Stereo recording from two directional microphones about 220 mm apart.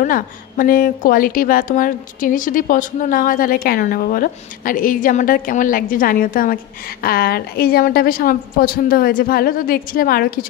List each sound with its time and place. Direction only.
0.0 s speech: 40° left (ahead or behind)